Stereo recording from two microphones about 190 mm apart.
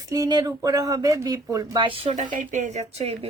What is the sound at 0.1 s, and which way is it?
Speech, 20° right (ahead or behind).